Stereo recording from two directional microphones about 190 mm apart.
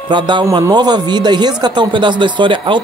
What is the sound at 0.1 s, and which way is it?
Speech, 25° right (ahead or behind).